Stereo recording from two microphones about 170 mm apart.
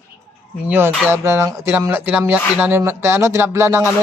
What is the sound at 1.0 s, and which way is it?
Speech, 15° right (ahead or behind).